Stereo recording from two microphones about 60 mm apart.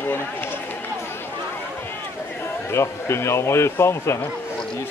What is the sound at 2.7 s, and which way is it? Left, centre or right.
A man's voice, left.